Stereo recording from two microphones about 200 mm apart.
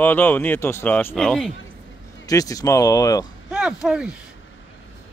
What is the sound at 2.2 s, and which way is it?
Speech, 15° left (ahead or behind).